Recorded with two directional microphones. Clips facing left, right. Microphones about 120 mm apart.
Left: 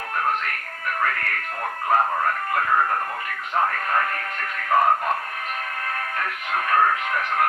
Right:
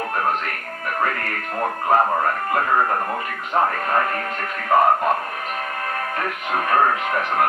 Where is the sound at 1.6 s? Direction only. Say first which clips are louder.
Right 3 dB; 30° right (ahead or behind).